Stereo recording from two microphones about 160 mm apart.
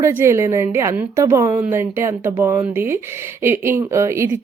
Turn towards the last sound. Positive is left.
turn(degrees=-15)  # may be behind; listen again after turning